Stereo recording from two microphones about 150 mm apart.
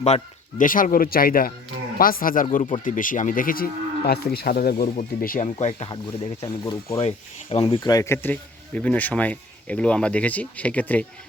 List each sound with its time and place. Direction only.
0.6 s speech: 65° left (ahead or behind); by 4.8 s 85° left
4.8 s speech: 60° left (ahead or behind)
5.5 s speech: 45° left (ahead or behind)
5.9 s speech: 30° left (ahead or behind)
7.9 s speech: 15° left (ahead or behind)